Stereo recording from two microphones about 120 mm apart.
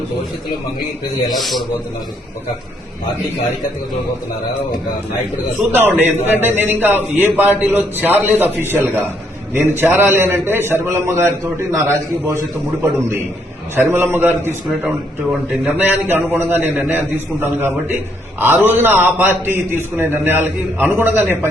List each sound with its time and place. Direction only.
1.4 s a man's voice: centre (ahead or behind)
5.7 s a man's voice: 15° right (ahead or behind)
13.7 s a man's voice: 20° right (ahead or behind)